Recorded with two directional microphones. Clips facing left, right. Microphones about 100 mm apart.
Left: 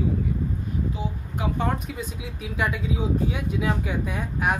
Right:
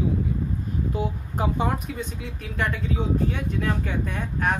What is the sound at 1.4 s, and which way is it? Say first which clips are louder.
Speech: right 3 dB; 40° right (ahead or behind).